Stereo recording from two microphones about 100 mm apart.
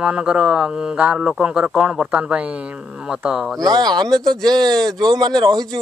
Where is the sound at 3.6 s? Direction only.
45° right (ahead or behind).